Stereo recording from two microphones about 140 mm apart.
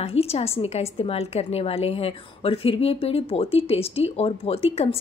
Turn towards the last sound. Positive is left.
turn(degrees=45)  # may be behind; listen again after turning